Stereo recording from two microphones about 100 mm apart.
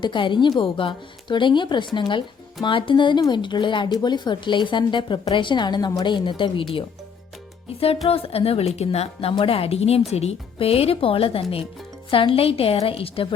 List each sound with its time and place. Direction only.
0.0 s speech: 55° left (ahead or behind)
7.7 s a woman's voice: 75° left (ahead or behind)